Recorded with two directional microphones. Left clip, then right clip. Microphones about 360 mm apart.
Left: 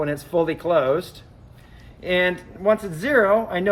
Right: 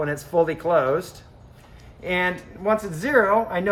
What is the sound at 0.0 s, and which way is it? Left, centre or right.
Speech, centre.